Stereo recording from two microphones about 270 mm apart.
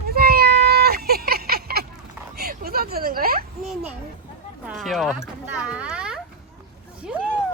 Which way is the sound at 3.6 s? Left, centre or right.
Centre.